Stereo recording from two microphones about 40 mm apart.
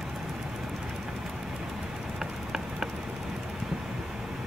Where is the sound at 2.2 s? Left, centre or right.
Centre.